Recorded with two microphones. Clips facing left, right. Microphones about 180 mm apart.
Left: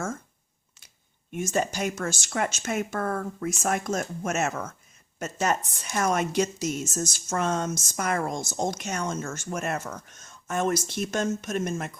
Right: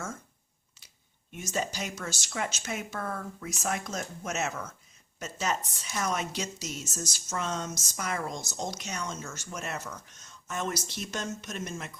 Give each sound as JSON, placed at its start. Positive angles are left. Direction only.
{"t": 1.3, "sound": "a woman's voice", "side_deg": 50}